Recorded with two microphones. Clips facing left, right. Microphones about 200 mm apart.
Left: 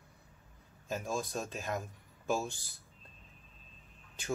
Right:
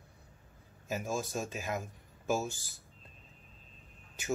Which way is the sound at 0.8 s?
5° right (ahead or behind).